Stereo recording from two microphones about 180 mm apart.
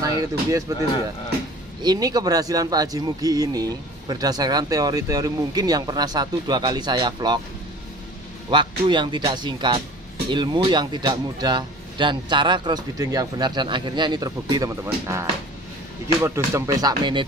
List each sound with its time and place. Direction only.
0.7 s speech: 20° right (ahead or behind)
8.5 s speech: 25° right (ahead or behind)